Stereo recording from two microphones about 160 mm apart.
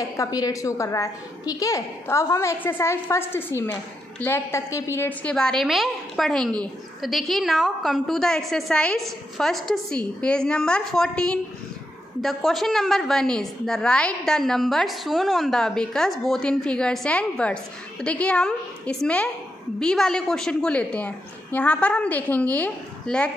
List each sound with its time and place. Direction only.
0.0 s a woman's voice: 20° left (ahead or behind)
5.3 s a woman's voice: 5° left (ahead or behind)